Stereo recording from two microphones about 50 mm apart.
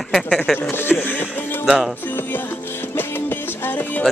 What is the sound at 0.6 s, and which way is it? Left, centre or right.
Speech, left.